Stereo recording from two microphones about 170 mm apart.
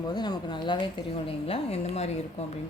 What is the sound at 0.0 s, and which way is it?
A woman's voice, 25° left (ahead or behind).